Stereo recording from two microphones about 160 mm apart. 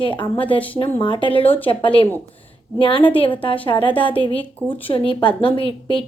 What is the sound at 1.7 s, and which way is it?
A woman's voice, 35° left (ahead or behind).